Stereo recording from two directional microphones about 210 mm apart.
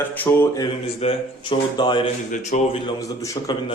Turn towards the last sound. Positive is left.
turn(degrees=15)  # may be behind; listen again after turning